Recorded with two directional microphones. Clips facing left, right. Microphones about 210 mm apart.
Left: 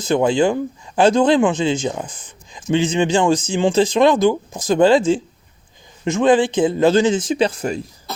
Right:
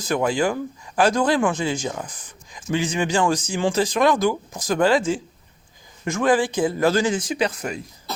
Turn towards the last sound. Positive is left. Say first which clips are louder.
# left 5 dB
turn(degrees=30)  # may be behind; listen again after turning